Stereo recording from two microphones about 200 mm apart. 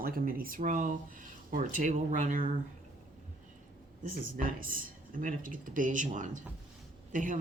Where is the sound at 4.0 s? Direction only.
45° right (ahead or behind).